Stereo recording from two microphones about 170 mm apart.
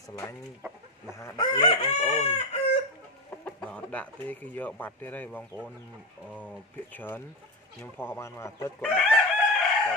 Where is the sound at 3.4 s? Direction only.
10° left (ahead or behind).